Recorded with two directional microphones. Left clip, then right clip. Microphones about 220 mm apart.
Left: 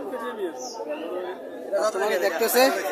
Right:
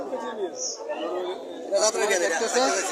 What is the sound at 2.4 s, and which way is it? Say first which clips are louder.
Speech: left 4 dB; 30° left (ahead or behind).